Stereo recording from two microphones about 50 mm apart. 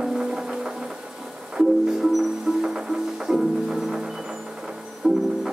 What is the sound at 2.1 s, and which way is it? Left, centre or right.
Music, centre.